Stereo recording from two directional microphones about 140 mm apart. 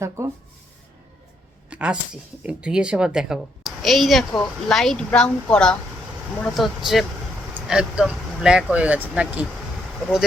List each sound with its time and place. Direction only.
0.2 s speech: 20° right (ahead or behind)
1.7 s a woman's voice: 5° right (ahead or behind)